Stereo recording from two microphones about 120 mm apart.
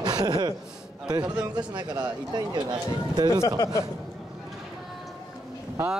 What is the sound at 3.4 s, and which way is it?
Speech, 30° left (ahead or behind).